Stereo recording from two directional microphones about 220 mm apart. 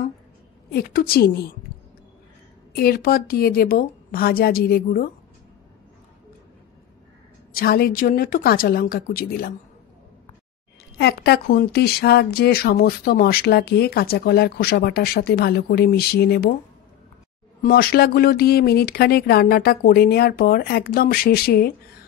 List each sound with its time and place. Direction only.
0.7 s speech: 45° left (ahead or behind)
2.7 s speech: 45° left (ahead or behind)
7.5 s a woman's voice: 45° left (ahead or behind)
11.0 s speech: 45° left (ahead or behind)
17.6 s speech: 40° left (ahead or behind)